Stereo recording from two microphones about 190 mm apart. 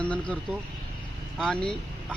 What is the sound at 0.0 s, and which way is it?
Speech, 5° left (ahead or behind).